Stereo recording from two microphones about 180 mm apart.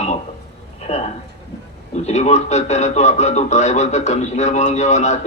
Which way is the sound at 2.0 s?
40° left (ahead or behind).